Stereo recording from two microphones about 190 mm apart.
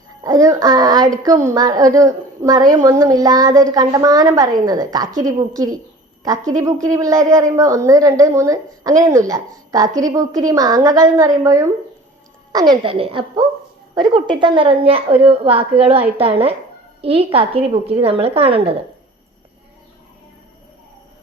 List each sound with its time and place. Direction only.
0.2 s a woman's voice: 20° right (ahead or behind)